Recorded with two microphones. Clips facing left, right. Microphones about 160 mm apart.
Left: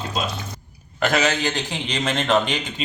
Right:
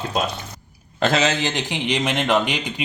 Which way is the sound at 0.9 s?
25° right (ahead or behind).